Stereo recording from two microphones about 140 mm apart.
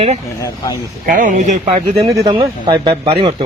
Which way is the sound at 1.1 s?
65° right (ahead or behind).